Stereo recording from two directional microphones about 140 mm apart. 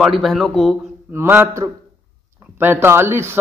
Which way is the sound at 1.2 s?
15° right (ahead or behind).